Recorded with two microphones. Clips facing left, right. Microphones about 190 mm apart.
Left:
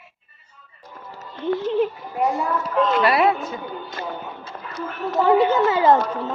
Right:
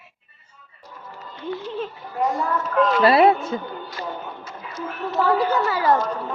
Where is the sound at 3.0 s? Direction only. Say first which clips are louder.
Right 3 dB; 30° right (ahead or behind).